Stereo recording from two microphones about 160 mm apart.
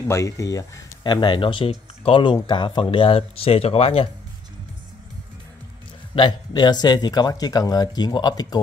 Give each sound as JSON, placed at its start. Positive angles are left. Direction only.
{"t": 0.1, "sound": "speech", "side_deg": 20}
{"t": 6.1, "sound": "speech", "side_deg": 30}